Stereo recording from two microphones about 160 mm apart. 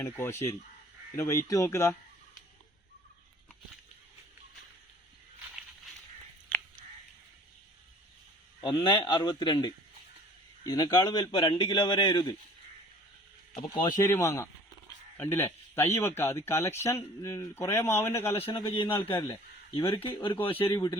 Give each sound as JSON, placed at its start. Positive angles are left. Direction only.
{"t": 0.0, "sound": "speech", "side_deg": 15}
{"t": 8.6, "sound": "a man's voice", "side_deg": 30}
{"t": 13.5, "sound": "a man's voice", "side_deg": 30}
{"t": 18.4, "sound": "a man's voice", "side_deg": 35}
{"t": 20.0, "sound": "a man's voice", "side_deg": 30}